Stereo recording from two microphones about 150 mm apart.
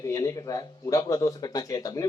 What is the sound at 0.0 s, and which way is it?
Speech, 25° left (ahead or behind).